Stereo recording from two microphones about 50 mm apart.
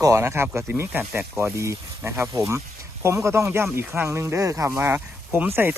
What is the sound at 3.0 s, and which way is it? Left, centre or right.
Speech, right.